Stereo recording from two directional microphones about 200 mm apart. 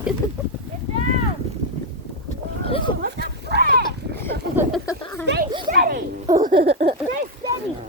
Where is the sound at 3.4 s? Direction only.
55° right (ahead or behind).